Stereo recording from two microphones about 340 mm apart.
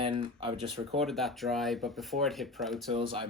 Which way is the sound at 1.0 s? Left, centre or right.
Centre.